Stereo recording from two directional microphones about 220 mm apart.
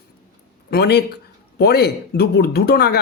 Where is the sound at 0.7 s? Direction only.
45° left (ahead or behind).